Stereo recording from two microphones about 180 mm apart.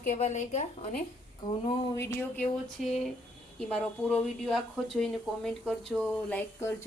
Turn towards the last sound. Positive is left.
turn(degrees=10)  # may be behind; listen again after turning